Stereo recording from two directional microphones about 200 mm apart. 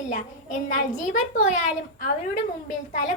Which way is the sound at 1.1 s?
40° left (ahead or behind).